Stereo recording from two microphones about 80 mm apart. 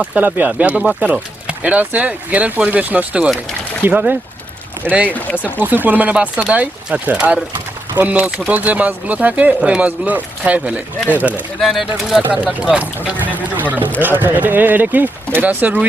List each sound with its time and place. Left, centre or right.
0.0 s speech: centre
11.6 s speech: centre
12.2 s speech: centre